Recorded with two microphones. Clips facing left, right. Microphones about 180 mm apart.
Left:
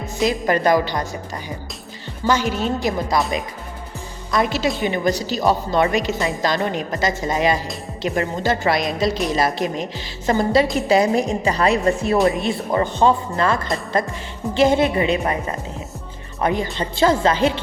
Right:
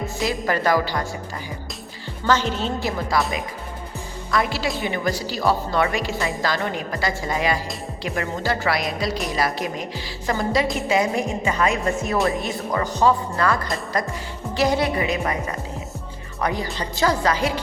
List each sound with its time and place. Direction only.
0.2 s a woman's voice: 20° left (ahead or behind)
2.2 s a woman's voice: 10° left (ahead or behind)
4.3 s a woman's voice: 20° left (ahead or behind)
16.4 s a woman's voice: 20° left (ahead or behind)